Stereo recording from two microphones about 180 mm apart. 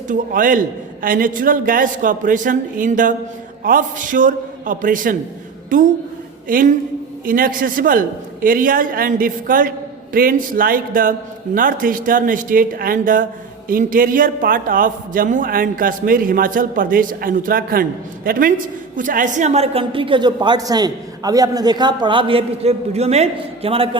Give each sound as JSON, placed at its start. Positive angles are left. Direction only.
{"t": 0.1, "sound": "a man's voice", "side_deg": -50}